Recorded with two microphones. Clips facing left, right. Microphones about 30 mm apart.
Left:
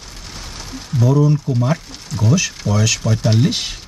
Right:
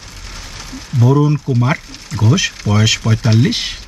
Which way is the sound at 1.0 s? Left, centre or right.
Right.